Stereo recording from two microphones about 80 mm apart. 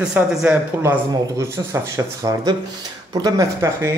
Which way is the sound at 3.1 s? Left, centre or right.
Right.